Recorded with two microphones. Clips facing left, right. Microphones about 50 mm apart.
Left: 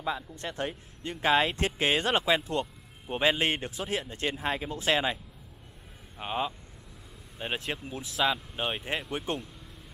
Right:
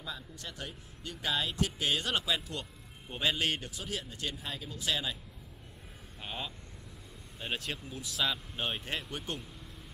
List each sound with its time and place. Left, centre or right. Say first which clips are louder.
0.0 s speech: left 10 dB; left
6.1 s speech: left 9 dB; left
8.2 s speech: left 5 dB; centre